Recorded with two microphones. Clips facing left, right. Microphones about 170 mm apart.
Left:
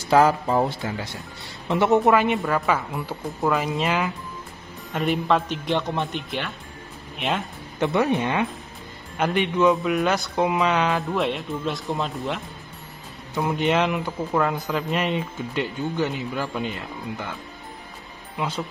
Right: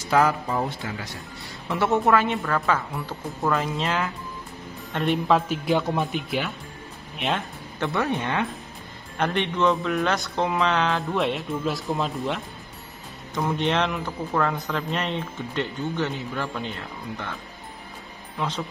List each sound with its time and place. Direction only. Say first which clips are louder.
0.1 s speech: left 4 dB; 30° left (ahead or behind); by 7.4 s centre (ahead or behind)
7.8 s speech: left 4 dB; 15° left (ahead or behind)
9.2 s speech: left 3 dB; 5° left (ahead or behind)
13.3 s speech: left 2 dB; 10° left (ahead or behind)